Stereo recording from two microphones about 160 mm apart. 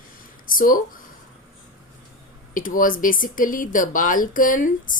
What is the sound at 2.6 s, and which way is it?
Speech, 60° left (ahead or behind).